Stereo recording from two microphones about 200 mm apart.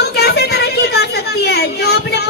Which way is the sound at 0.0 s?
55° left (ahead or behind).